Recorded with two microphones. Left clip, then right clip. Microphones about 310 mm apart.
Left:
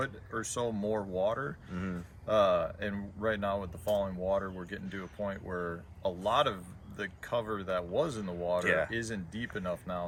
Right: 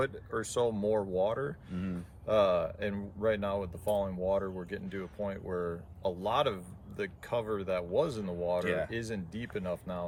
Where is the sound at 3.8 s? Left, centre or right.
Centre.